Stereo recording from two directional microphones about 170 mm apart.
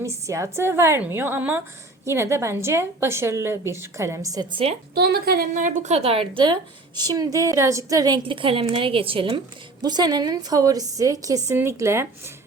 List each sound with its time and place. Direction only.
0.0 s a woman's voice: 15° right (ahead or behind)
4.9 s a woman's voice: 65° right (ahead or behind); by 12.0 s 15° right (ahead or behind)